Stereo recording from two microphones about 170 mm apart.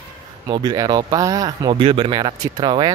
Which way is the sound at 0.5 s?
25° right (ahead or behind).